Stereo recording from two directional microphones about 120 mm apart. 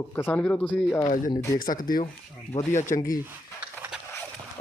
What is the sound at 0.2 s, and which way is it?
Speech, 15° left (ahead or behind).